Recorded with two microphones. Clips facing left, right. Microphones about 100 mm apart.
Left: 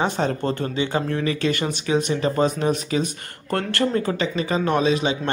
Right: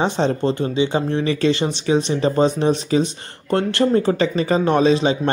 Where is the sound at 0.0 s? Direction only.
25° right (ahead or behind).